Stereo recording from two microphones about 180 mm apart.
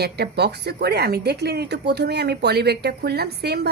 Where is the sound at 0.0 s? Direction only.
65° right (ahead or behind).